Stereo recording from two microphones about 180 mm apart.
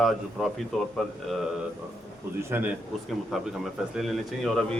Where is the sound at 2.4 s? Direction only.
10° right (ahead or behind).